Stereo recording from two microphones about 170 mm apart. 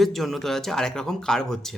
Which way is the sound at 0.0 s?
Centre (ahead or behind).